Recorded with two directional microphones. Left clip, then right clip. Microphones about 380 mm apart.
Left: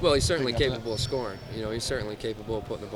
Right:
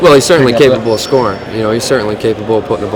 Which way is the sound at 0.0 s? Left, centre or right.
Left.